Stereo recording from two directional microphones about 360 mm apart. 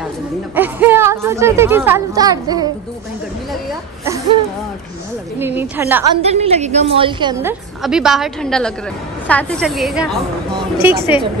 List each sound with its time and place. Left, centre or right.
0.6 s speech: centre
5.4 s a woman's voice: centre
6.2 s speech: centre
7.8 s a woman's voice: centre